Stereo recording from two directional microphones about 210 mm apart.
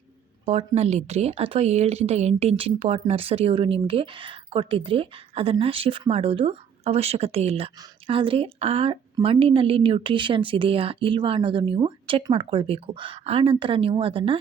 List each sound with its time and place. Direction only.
0.4 s speech: 30° right (ahead or behind)